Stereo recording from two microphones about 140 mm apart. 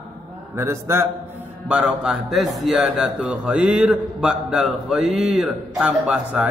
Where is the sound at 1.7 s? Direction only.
5° right (ahead or behind).